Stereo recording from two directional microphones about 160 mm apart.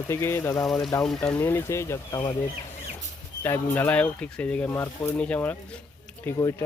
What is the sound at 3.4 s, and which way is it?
Speech, 10° left (ahead or behind).